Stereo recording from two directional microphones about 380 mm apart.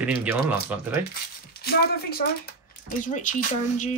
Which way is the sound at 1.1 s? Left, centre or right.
Left.